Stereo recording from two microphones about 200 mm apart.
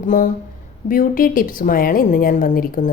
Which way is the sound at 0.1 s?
40° left (ahead or behind).